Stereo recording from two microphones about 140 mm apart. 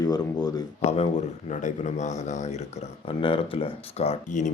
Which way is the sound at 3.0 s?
40° left (ahead or behind).